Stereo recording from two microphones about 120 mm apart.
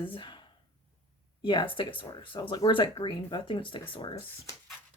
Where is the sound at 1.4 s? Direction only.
45° left (ahead or behind).